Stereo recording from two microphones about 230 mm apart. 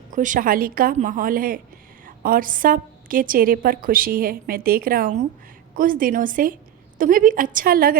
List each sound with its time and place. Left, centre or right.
0.1 s a woman's voice: right